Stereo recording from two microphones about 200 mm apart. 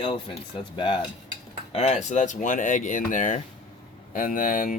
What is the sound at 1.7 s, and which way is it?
Speech, 35° left (ahead or behind).